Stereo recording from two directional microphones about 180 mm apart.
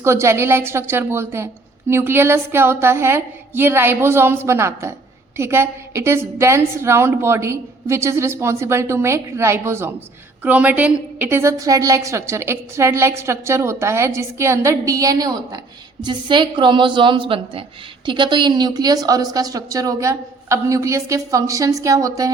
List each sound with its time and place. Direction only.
0.0 s a woman's voice: 15° right (ahead or behind)